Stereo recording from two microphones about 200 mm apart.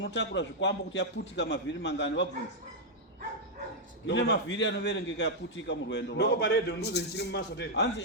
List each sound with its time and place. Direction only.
0.0 s a man's voice: 60° left (ahead or behind)
4.0 s a man's voice: 65° left (ahead or behind)